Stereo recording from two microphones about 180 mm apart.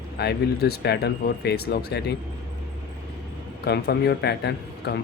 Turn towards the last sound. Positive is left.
turn(degrees=70)  # may be behind; listen again after turning